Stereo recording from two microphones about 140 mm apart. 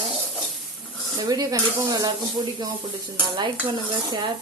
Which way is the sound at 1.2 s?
25° right (ahead or behind).